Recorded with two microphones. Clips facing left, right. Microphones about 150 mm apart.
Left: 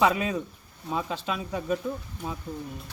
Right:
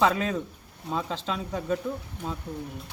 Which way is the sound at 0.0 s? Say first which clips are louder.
Even; 10° left (ahead or behind).